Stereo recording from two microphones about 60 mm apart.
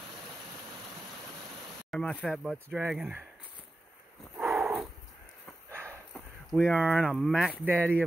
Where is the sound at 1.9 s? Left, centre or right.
Centre.